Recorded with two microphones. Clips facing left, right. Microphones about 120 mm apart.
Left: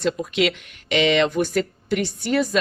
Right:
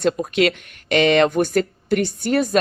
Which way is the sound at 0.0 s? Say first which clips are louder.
Right 3 dB; 50° right (ahead or behind).